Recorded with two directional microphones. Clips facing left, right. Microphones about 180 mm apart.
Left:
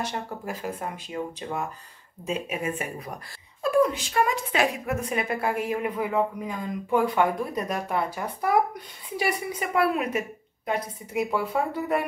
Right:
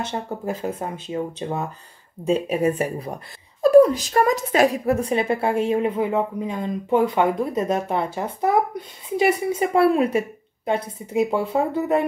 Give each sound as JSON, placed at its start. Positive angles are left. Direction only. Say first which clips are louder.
{"t": 0.0, "sound": "a woman's voice", "louder": "right 4 dB", "side_deg": -25}